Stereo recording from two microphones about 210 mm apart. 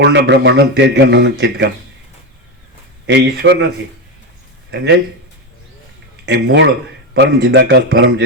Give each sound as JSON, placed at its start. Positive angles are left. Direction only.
{"t": 0.0, "sound": "speech", "side_deg": -55}
{"t": 3.1, "sound": "speech", "side_deg": -55}
{"t": 4.7, "sound": "speech", "side_deg": -55}
{"t": 6.2, "sound": "speech", "side_deg": -55}